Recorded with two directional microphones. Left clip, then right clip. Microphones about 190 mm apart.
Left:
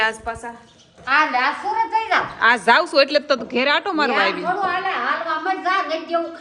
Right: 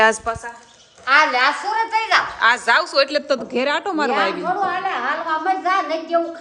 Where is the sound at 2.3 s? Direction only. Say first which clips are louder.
Left 4 dB; 5° right (ahead or behind).